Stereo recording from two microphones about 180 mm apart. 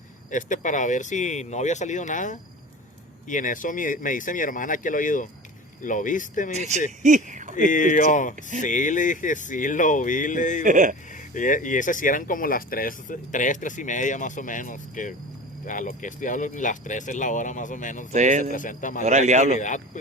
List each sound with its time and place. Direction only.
0.3 s speech: 45° left (ahead or behind)
6.5 s speech: 40° right (ahead or behind)
7.5 s speech: 45° left (ahead or behind)
8.4 s speech: 45° right (ahead or behind)
8.6 s speech: 45° left (ahead or behind)
10.6 s speech: 45° right (ahead or behind)
11.1 s speech: 45° left (ahead or behind)
18.1 s speech: 45° right (ahead or behind)
18.5 s speech: 45° left (ahead or behind)
19.0 s speech: 40° right (ahead or behind)
19.5 s speech: 40° left (ahead or behind)